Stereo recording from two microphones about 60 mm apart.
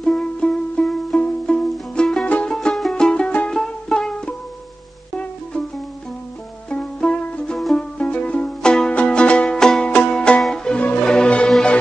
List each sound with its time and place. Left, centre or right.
0.0 s music: centre
2.2 s music: left
2.5 s music: centre
6.7 s music: centre
10.8 s music: left